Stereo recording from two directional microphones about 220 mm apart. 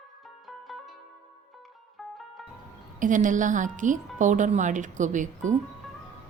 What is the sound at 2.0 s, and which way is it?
Music, centre (ahead or behind).